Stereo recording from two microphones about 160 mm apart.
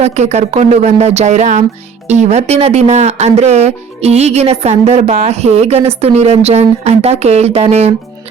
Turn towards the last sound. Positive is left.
turn(degrees=-40)  # may be behind; listen again after turning